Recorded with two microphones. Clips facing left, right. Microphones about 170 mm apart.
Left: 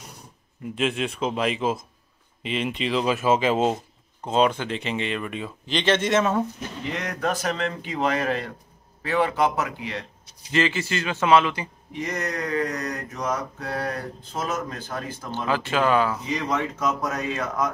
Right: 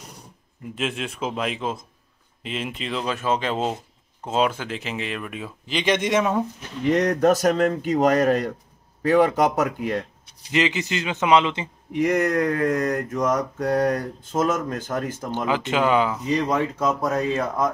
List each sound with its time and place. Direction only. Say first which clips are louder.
0.7 s speech: left 3 dB; centre (ahead or behind)
6.9 s mantra: right 10 dB; 40° right (ahead or behind)
10.5 s a man's voice: right 1 dB; 20° right (ahead or behind)
12.0 s mantra: right 9 dB; 55° right (ahead or behind)
15.3 s speech: right 1 dB; 20° right (ahead or behind)
16.3 s speech: right 6 dB; 30° right (ahead or behind)